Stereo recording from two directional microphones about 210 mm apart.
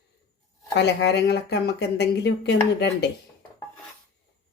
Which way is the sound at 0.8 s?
55° left (ahead or behind).